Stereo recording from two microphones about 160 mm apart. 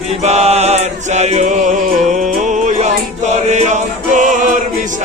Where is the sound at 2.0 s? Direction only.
50° right (ahead or behind).